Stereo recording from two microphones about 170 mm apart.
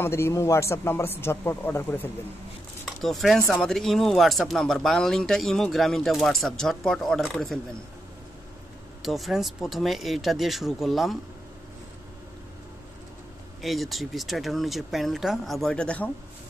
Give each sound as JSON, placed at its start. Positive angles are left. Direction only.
{"t": 0.0, "sound": "a man's voice", "side_deg": 15}
{"t": 2.8, "sound": "speech", "side_deg": 0}
{"t": 9.0, "sound": "speech", "side_deg": 0}
{"t": 13.6, "sound": "speech", "side_deg": 0}